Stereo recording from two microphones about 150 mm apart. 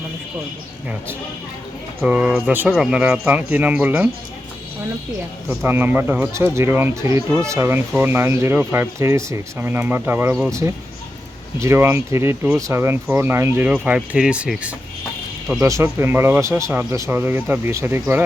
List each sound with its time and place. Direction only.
2.0 s speech: 10° right (ahead or behind)
5.5 s speech: 15° right (ahead or behind)
15.6 s speech: 20° right (ahead or behind)